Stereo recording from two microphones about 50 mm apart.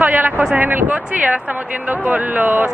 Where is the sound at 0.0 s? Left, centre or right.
Right.